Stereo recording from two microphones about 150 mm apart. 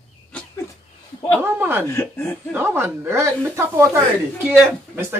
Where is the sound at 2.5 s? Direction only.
15° right (ahead or behind).